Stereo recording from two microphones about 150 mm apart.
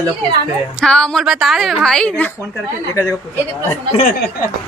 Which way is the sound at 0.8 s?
5° left (ahead or behind).